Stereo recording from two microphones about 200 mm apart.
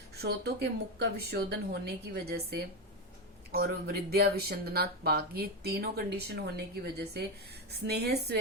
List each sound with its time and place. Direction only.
0.2 s a woman's voice: 55° right (ahead or behind)